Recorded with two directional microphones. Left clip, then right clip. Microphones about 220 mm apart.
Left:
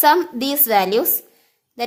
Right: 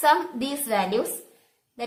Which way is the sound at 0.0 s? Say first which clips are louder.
Left 6 dB; 45° left (ahead or behind).